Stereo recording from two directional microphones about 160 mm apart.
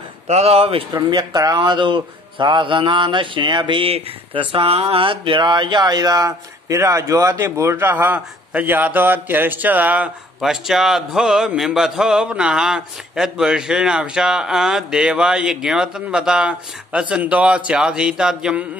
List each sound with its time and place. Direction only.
0.3 s speech: 40° right (ahead or behind)
0.9 s speech: 25° right (ahead or behind); by 18.7 s 5° right (ahead or behind)